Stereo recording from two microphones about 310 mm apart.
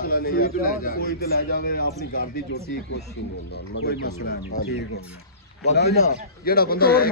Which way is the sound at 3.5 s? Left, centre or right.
Left.